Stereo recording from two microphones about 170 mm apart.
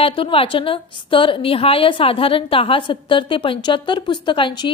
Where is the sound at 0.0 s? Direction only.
30° left (ahead or behind).